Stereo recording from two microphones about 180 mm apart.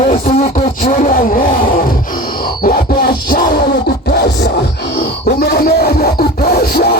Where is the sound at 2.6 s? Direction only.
55° left (ahead or behind).